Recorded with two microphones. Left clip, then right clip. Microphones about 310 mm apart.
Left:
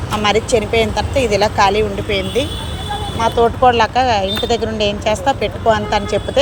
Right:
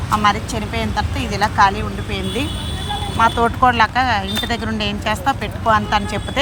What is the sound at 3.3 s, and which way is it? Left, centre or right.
Speech, right.